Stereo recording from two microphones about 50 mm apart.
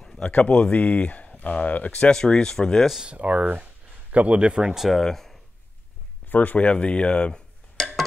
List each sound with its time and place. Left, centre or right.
0.0 s a sound: centre
0.3 s speech: left
2.0 s speech: centre
3.0 s speech: right
4.9 s speech: centre
6.2 s speech: left
6.7 s speech: left
7.7 s a sound: centre